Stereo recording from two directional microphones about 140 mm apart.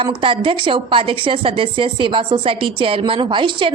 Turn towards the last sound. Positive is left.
turn(degrees=-35)  # may be behind; listen again after turning